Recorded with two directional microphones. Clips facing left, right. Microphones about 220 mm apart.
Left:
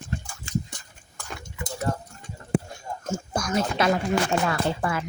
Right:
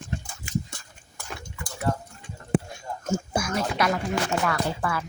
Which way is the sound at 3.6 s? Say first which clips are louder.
Left 4 dB; 25° left (ahead or behind).